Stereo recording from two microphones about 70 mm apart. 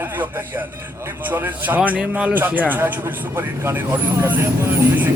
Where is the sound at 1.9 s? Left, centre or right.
Centre.